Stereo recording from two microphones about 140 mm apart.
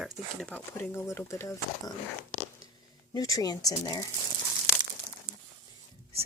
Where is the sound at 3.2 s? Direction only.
25° left (ahead or behind).